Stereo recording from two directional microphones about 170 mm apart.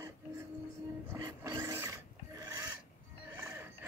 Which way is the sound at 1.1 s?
20° right (ahead or behind).